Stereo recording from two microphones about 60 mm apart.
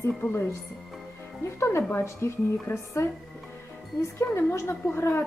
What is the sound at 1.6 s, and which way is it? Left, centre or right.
A woman's voice, left.